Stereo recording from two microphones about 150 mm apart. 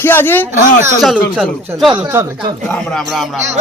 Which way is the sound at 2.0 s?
20° right (ahead or behind).